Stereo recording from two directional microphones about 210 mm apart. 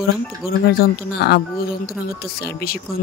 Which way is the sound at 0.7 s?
45° left (ahead or behind).